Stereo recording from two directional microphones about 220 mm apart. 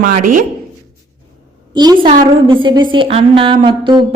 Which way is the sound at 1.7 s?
20° right (ahead or behind).